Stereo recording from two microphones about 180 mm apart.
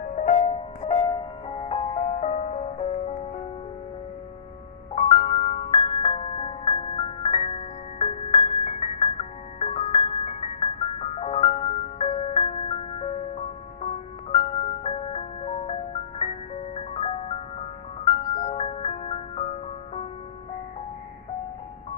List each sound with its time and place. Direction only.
0.0 s music: 45° left (ahead or behind)
4.9 s music: 35° left (ahead or behind)